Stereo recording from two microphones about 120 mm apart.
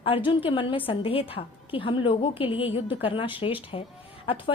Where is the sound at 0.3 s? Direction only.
50° left (ahead or behind).